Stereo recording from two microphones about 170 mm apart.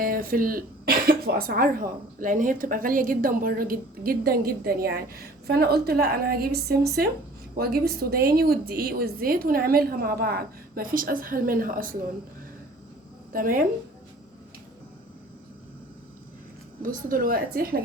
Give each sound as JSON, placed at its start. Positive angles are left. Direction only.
{"t": 0.0, "sound": "speech", "side_deg": -55}
{"t": 13.3, "sound": "speech", "side_deg": -55}
{"t": 16.8, "sound": "speech", "side_deg": -55}